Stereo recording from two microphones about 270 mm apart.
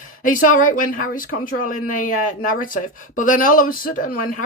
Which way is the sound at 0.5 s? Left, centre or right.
Left.